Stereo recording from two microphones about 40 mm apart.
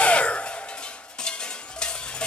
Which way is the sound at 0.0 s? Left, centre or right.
Left.